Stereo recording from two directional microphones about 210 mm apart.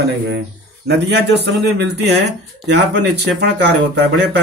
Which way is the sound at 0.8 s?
55° right (ahead or behind).